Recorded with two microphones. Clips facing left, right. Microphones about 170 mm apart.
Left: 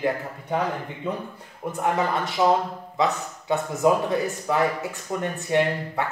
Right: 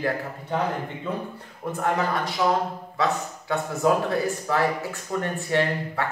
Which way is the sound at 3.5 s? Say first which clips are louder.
Left 2 dB; 20° left (ahead or behind).